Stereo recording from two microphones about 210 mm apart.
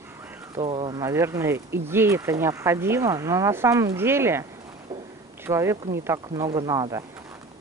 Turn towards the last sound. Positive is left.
turn(degrees=-15)  # may be behind; listen again after turning